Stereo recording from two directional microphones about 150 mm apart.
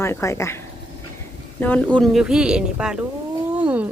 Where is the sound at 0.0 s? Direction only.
20° left (ahead or behind).